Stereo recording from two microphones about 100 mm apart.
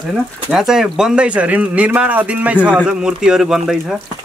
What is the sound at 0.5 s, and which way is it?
Speech, 5° right (ahead or behind).